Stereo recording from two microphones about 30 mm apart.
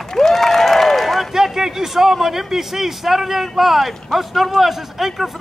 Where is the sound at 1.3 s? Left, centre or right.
Centre.